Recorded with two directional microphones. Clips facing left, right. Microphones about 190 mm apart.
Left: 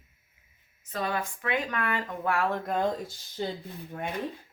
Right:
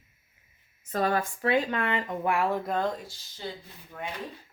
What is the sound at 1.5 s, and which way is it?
Speech, 25° right (ahead or behind).